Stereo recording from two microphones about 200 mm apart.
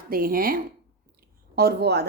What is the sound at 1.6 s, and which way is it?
Speech, 55° right (ahead or behind).